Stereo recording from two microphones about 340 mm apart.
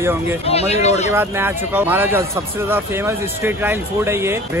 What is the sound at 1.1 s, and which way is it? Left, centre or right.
A man's voice, centre.